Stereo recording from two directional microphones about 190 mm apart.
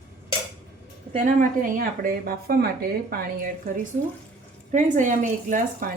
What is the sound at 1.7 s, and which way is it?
A woman's voice, 50° right (ahead or behind).